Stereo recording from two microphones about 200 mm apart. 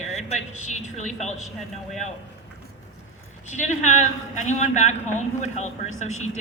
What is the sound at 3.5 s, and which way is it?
A man's voice, 35° left (ahead or behind).